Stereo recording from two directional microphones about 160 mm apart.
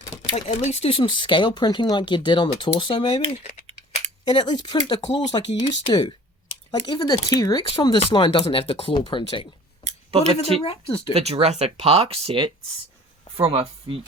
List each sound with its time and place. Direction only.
0.1 s speech: 40° left (ahead or behind)
4.3 s speech: 30° left (ahead or behind)
9.8 s a sound: 45° right (ahead or behind)
10.6 s speech: 35° left (ahead or behind)
11.1 s speech: 40° right (ahead or behind)